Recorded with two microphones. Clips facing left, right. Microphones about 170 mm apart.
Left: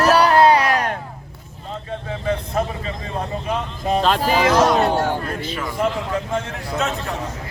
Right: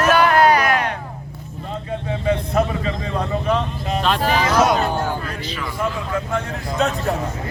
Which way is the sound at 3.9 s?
40° left (ahead or behind).